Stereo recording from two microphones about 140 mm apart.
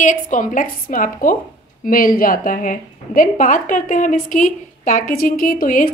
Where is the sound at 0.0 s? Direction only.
65° left (ahead or behind).